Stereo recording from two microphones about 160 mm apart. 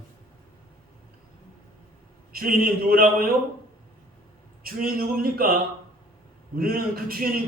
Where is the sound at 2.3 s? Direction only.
65° right (ahead or behind).